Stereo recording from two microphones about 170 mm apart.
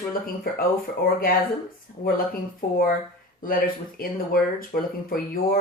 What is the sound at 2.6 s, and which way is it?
Speech, 60° left (ahead or behind).